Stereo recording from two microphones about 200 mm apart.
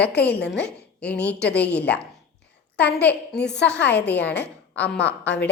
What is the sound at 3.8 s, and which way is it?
Speech, 55° left (ahead or behind).